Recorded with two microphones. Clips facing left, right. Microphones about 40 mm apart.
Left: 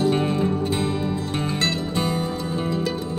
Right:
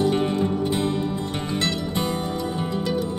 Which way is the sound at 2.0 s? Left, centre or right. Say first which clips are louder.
Left 3 dB; left.